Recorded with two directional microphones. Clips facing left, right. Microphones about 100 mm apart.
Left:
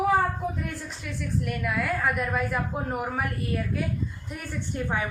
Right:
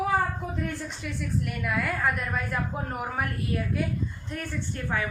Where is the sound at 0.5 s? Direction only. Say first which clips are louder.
Right 2 dB; centre (ahead or behind).